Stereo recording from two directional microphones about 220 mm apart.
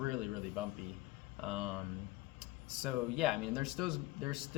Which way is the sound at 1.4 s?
Centre (ahead or behind).